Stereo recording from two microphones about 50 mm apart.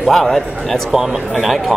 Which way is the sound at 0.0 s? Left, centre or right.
Centre.